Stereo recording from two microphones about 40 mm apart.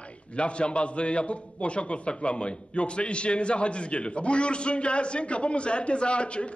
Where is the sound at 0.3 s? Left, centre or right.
Left.